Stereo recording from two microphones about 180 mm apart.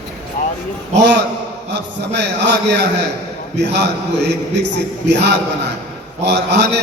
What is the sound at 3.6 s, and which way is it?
A man's voice, 70° right (ahead or behind).